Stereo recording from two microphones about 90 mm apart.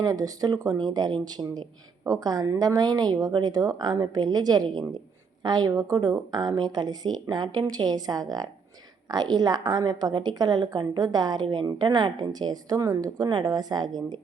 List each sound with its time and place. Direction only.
0.0 s speech: 45° right (ahead or behind)